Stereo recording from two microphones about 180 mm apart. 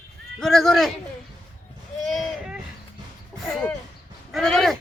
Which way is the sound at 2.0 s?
Centre (ahead or behind).